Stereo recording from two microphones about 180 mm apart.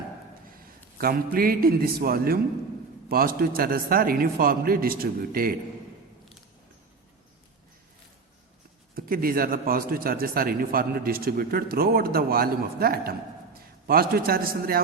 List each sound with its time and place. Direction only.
0.5 s a man's voice: 55° right (ahead or behind)
9.0 s a man's voice: 55° right (ahead or behind)